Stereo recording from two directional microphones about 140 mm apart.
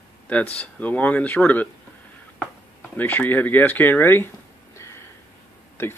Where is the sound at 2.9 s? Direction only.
10° left (ahead or behind).